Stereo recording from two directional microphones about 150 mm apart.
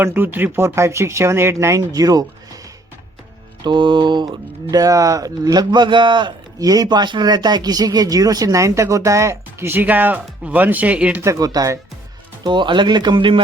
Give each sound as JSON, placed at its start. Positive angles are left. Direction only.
{"t": 0.0, "sound": "speech", "side_deg": -15}
{"t": 3.6, "sound": "speech", "side_deg": -30}
{"t": 11.3, "sound": "speech", "side_deg": -25}